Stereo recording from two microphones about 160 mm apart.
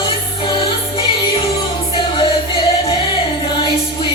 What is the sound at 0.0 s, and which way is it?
Music, 30° left (ahead or behind).